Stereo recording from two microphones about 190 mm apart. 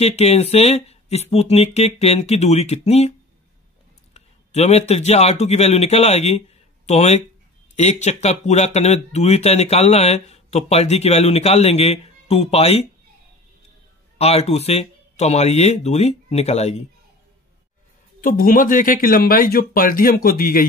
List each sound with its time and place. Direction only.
0.0 s speech: 35° left (ahead or behind)
4.1 s speech: 35° left (ahead or behind)
14.1 s speech: 35° left (ahead or behind)
18.2 s speech: 45° left (ahead or behind)